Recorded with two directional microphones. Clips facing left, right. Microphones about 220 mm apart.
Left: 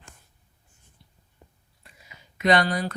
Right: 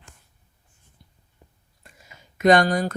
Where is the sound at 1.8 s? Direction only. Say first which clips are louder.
Right 2 dB; 45° right (ahead or behind).